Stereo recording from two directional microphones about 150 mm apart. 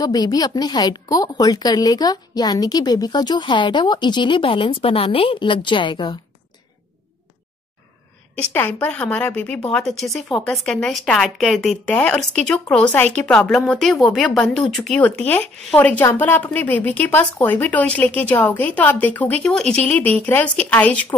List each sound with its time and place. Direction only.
0.0 s a woman's voice: 25° left (ahead or behind)
8.5 s speech: 10° left (ahead or behind)